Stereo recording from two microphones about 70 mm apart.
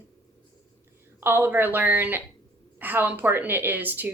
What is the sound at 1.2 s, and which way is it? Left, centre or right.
Speech, right.